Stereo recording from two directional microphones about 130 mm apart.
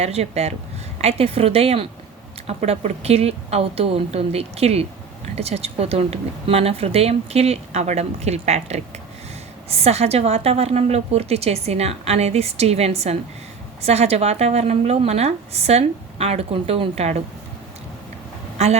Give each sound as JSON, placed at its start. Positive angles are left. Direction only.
{"t": 0.0, "sound": "a woman's voice", "side_deg": -55}
{"t": 18.5, "sound": "vehicle", "side_deg": -55}